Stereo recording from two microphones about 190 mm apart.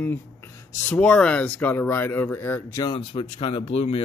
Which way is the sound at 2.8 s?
25° left (ahead or behind).